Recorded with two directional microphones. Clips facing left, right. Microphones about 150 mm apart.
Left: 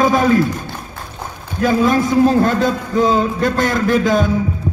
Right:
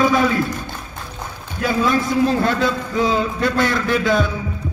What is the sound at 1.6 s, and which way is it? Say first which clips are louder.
A man's voice: left 4 dB; 45° left (ahead or behind).